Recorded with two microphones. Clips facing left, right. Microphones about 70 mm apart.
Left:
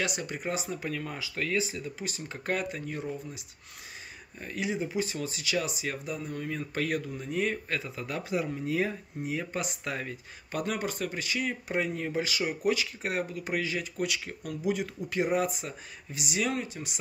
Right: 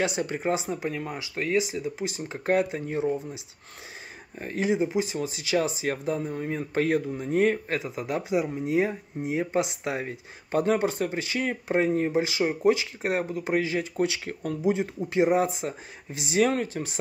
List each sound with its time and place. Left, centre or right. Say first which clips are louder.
0.0 s speech: right 6 dB; right
4.4 s speech: right 7 dB; right
4.7 s speech: right 5 dB; right
7.8 s speech: right 6 dB; right
16.3 s speech: right 8 dB; right